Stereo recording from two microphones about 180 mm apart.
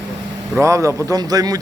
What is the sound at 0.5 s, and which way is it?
Speech, 15° right (ahead or behind).